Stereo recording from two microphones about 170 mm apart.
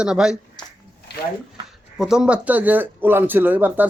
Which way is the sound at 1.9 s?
5° right (ahead or behind).